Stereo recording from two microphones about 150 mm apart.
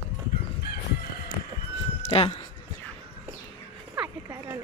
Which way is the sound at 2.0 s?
40° left (ahead or behind).